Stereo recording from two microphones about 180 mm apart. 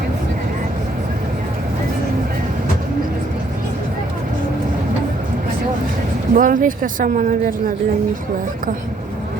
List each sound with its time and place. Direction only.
6.3 s speech: 50° right (ahead or behind)